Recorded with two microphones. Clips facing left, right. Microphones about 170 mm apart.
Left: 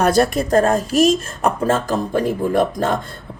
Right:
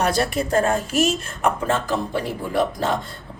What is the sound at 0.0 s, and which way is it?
Speech, 50° left (ahead or behind).